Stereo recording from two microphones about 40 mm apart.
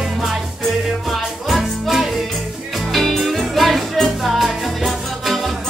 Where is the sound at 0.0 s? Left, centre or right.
Centre.